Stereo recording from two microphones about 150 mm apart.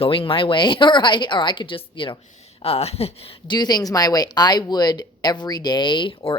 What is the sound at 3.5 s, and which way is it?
Speech, 25° left (ahead or behind).